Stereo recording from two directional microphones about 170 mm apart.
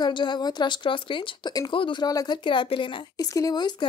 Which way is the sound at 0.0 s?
25° left (ahead or behind).